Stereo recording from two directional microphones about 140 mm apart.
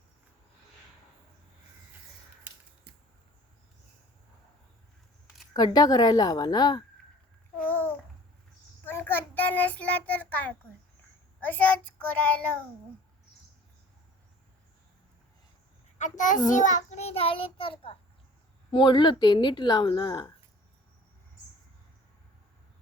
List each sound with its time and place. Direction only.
5.5 s a woman's voice: 30° left (ahead or behind)
7.6 s babbling: 15° left (ahead or behind)
8.8 s child singing: 15° left (ahead or behind)
11.3 s a child's voice: 10° left (ahead or behind)
16.0 s a child's voice: 65° left (ahead or behind); by 20.3 s 30° left (ahead or behind)